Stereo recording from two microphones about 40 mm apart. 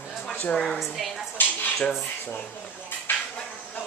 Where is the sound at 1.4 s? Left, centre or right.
Left.